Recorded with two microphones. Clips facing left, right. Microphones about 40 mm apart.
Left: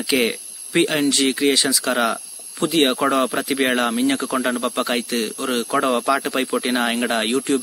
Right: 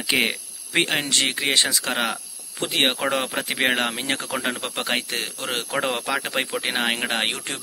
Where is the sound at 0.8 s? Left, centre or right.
Right.